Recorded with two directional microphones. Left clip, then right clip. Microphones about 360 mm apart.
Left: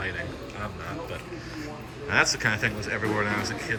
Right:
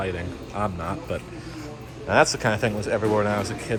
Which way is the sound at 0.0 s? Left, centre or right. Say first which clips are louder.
Right 2 dB; centre.